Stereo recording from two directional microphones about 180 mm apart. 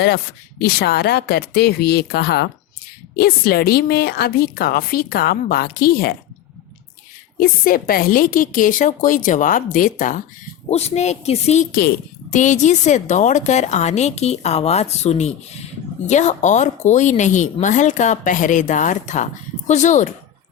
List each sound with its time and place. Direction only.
0.6 s a woman's voice: 60° left (ahead or behind)
7.3 s a woman's voice: 55° left (ahead or behind)